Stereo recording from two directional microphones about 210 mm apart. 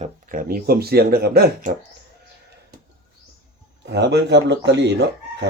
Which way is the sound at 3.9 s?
55° right (ahead or behind).